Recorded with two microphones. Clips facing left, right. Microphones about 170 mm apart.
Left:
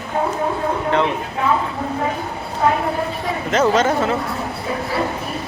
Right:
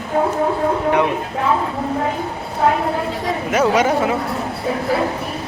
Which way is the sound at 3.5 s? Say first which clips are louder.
Even; 10° right (ahead or behind).